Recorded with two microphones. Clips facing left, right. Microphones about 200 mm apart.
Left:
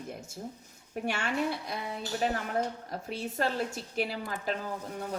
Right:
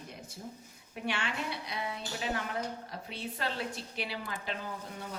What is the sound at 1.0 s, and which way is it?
A woman's voice, 45° left (ahead or behind).